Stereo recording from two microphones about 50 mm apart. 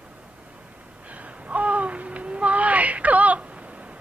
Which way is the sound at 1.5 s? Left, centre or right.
Right.